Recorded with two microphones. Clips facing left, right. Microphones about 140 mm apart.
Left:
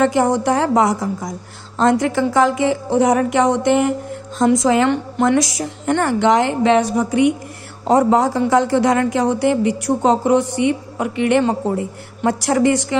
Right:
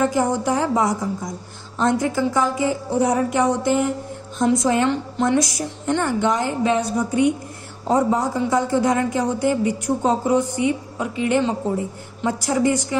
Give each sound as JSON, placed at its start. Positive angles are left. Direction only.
{"t": 0.0, "sound": "a woman's voice", "side_deg": 80}
{"t": 4.6, "sound": "a woman's voice", "side_deg": 90}